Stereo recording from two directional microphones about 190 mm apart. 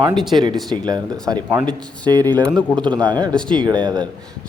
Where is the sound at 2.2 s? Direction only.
10° left (ahead or behind).